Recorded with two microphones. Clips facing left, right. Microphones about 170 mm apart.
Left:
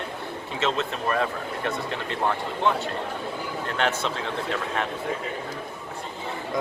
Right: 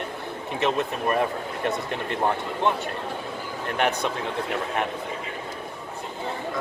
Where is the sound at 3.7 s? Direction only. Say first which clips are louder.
Right 2 dB; 15° right (ahead or behind).